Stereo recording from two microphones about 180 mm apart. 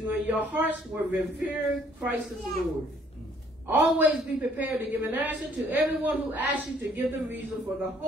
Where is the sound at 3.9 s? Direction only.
10° right (ahead or behind).